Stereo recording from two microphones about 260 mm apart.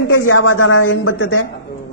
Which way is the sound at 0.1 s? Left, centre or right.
Left.